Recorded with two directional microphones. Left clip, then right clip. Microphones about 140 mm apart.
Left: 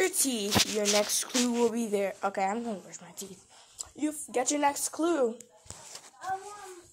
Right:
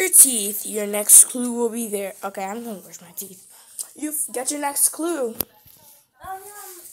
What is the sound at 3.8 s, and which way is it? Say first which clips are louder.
Speech: right 3 dB; 25° left (ahead or behind).